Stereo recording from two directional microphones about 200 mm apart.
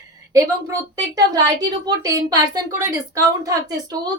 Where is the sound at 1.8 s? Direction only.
20° right (ahead or behind).